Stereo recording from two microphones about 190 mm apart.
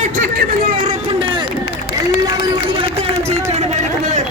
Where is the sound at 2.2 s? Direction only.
25° right (ahead or behind).